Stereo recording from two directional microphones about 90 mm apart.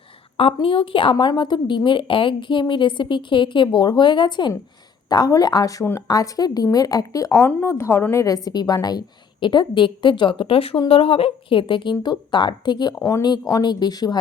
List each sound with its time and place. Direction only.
0.3 s a woman's voice: 90° left; by 1.1 s 70° left (ahead or behind)
1.2 s a woman's voice: 55° left (ahead or behind)
5.0 s a woman's voice: 45° left (ahead or behind)
7.3 s a woman's voice: 30° left (ahead or behind); by 14.2 s 50° left (ahead or behind)